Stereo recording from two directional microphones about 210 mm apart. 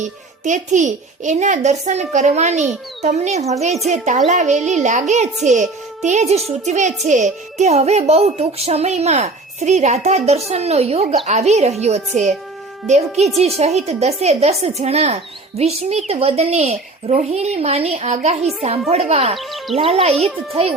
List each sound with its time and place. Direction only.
0.0 s a child's voice: 35° right (ahead or behind)
19.4 s speech: centre (ahead or behind)
19.7 s speech: 30° right (ahead or behind)